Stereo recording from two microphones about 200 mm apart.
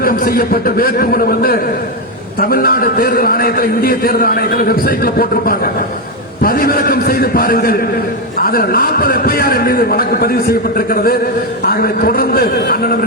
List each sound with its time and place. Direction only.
0.0 s a man's voice: 45° left (ahead or behind)